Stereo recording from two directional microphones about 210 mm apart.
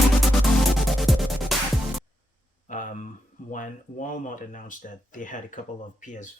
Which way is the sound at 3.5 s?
40° left (ahead or behind).